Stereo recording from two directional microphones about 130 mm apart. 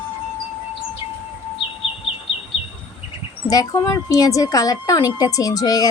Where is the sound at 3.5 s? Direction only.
30° left (ahead or behind).